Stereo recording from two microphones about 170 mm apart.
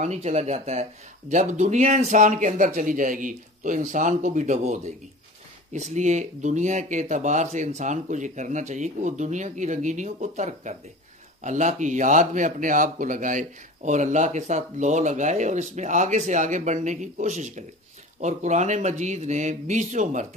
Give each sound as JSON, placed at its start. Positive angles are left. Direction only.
{"t": 0.0, "sound": "speech", "side_deg": -40}